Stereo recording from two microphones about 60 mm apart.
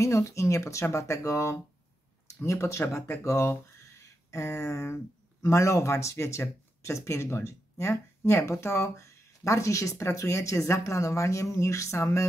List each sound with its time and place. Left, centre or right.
0.0 s speech: left